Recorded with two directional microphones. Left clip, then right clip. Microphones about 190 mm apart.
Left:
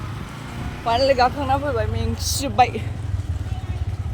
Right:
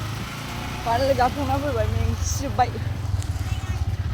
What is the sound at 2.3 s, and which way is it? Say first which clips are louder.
Speech: left 5 dB; 50° left (ahead or behind).